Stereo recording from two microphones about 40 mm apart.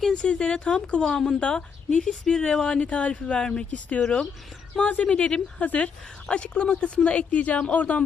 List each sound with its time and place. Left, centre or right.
0.1 s speech: left
2.8 s speech: left
3.7 s speech: left
4.0 s speech: left
4.8 s speech: left
5.0 s speech: left
5.5 s speech: left